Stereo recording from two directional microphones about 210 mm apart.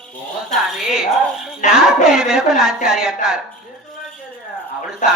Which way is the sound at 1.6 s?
35° left (ahead or behind).